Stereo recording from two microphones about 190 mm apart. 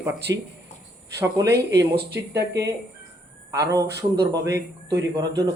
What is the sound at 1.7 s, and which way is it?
Speech, 60° right (ahead or behind).